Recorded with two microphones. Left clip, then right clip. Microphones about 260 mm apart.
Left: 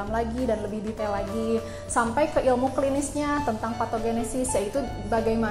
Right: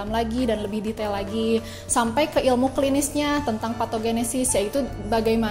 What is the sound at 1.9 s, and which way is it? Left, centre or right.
A woman's voice, right.